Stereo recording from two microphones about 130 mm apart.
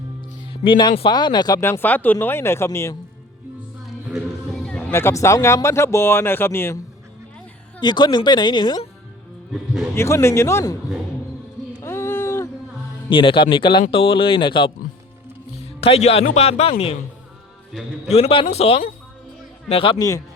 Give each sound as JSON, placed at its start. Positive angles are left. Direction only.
{"t": 0.5, "sound": "speech", "side_deg": 40}
{"t": 1.6, "sound": "speech", "side_deg": 15}
{"t": 4.9, "sound": "speech", "side_deg": 20}
{"t": 7.8, "sound": "speech", "side_deg": 35}
{"t": 9.9, "sound": "speech", "side_deg": 20}
{"t": 11.8, "sound": "a sound", "side_deg": 20}
{"t": 13.1, "sound": "speech", "side_deg": 40}
{"t": 15.8, "sound": "a man's voice", "side_deg": 50}
{"t": 17.7, "sound": "a man's voice", "side_deg": 0}
{"t": 18.1, "sound": "a man's voice", "side_deg": 50}